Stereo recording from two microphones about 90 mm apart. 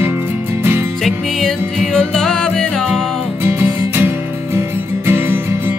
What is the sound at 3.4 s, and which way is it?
Music, 25° right (ahead or behind).